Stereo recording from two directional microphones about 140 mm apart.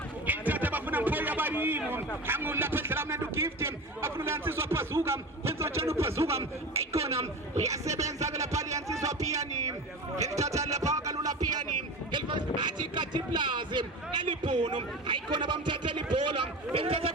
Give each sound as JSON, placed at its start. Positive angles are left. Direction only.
{"t": 0.3, "sound": "a sound", "side_deg": -10}
{"t": 2.2, "sound": "a man's voice", "side_deg": -15}
{"t": 7.0, "sound": "a woman's voice", "side_deg": -50}
{"t": 7.7, "sound": "a man's voice", "side_deg": -25}
{"t": 8.4, "sound": "a sound", "side_deg": -25}
{"t": 10.2, "sound": "a man's voice", "side_deg": -25}
{"t": 10.5, "sound": "music", "side_deg": -25}
{"t": 12.1, "sound": "sheep", "side_deg": -30}
{"t": 12.9, "sound": "a man's voice", "side_deg": -35}
{"t": 16.1, "sound": "a sound", "side_deg": -35}